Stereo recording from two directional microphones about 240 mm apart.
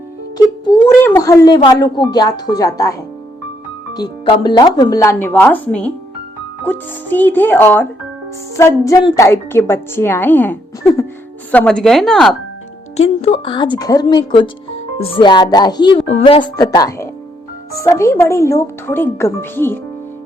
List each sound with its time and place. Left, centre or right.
0.3 s music: centre
0.9 s a woman's voice: centre
3.9 s a woman's voice: centre
13.0 s a woman's voice: left; by 19.8 s centre